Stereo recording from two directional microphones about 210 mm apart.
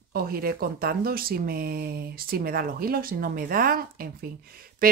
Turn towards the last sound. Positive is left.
turn(degrees=-45)  # may be behind; listen again after turning